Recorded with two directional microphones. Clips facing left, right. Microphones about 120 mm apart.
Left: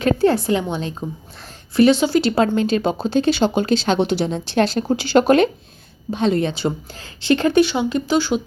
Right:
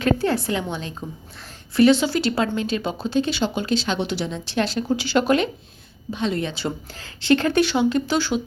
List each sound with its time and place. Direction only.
0.0 s a woman's voice: 25° left (ahead or behind)
2.3 s speech: 40° left (ahead or behind)
6.1 s speech: 35° left (ahead or behind)
6.5 s speech: 20° left (ahead or behind)